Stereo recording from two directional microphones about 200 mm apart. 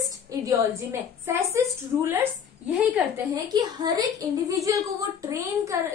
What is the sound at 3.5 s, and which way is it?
A woman's voice, 20° right (ahead or behind).